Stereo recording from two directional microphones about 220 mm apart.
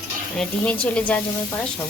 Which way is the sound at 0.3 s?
5° left (ahead or behind).